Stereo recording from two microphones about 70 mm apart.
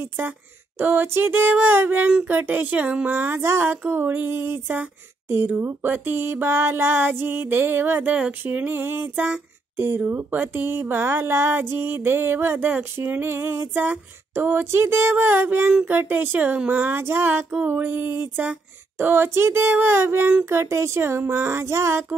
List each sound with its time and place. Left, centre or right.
0.7 s music: right
3.1 s speech: right
5.7 s music: right
9.8 s speech: right
15.9 s music: right
17.6 s speech: right